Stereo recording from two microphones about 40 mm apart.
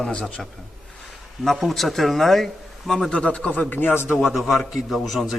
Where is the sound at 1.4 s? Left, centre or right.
Centre.